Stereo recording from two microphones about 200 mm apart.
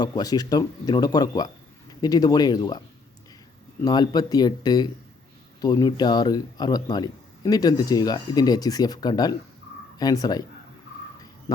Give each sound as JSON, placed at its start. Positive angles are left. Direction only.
{"t": 0.0, "sound": "speech", "side_deg": 20}
{"t": 3.8, "sound": "speech", "side_deg": 20}